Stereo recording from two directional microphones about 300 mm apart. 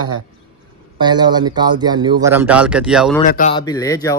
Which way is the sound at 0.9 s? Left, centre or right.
Centre.